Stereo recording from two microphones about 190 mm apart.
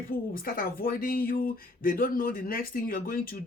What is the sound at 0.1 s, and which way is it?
Speech, 50° left (ahead or behind).